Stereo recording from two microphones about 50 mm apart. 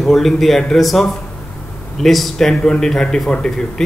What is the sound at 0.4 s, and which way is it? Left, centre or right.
A man's voice, centre.